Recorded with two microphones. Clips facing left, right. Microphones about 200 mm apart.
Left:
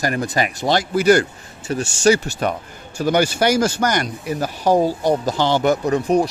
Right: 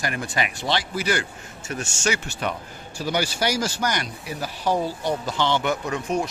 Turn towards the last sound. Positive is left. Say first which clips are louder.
# left 8 dB
turn(degrees=35)  # may be behind; listen again after turning